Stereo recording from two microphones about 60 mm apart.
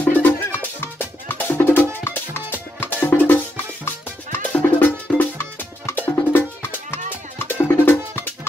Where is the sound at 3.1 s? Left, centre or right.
Left.